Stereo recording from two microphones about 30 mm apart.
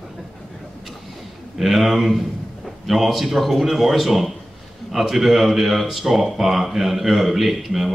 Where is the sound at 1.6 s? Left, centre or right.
Centre.